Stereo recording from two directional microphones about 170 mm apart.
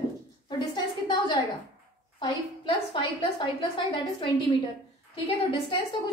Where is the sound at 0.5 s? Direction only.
25° left (ahead or behind).